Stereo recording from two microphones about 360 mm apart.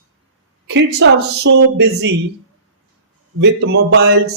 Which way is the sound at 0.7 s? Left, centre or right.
Right.